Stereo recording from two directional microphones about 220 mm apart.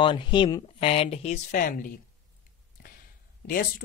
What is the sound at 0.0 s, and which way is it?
Speech, 20° left (ahead or behind).